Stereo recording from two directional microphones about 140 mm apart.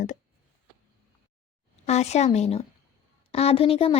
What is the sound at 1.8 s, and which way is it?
A woman's voice, 50° left (ahead or behind).